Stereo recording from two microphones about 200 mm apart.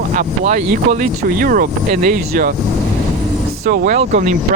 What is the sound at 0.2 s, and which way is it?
Speech, 40° right (ahead or behind).